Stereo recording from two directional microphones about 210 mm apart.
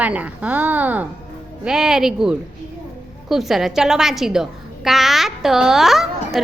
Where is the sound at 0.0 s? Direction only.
5° right (ahead or behind).